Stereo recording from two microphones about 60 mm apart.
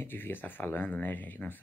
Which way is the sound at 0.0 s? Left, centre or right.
Left.